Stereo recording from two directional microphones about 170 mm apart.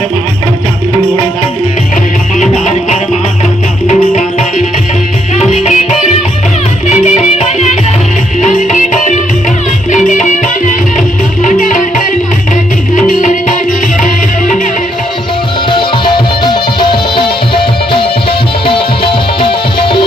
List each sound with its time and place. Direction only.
2.4 s music: 45° left (ahead or behind)
15.7 s music: 30° left (ahead or behind)